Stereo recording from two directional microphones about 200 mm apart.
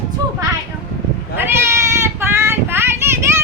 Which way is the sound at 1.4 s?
15° right (ahead or behind).